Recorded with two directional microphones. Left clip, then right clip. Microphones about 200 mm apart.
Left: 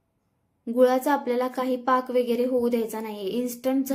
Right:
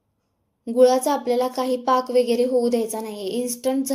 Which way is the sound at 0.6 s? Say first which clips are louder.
Right 4 dB; 10° left (ahead or behind).